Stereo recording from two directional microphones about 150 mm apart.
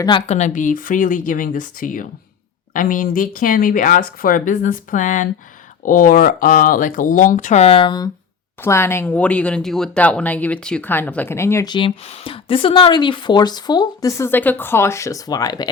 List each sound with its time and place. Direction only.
0.3 s speech: 50° left (ahead or behind); by 8.1 s 30° left (ahead or behind)
8.6 s speech: 15° left (ahead or behind)
11.9 s speech: 40° left (ahead or behind); by 15.7 s 25° left (ahead or behind)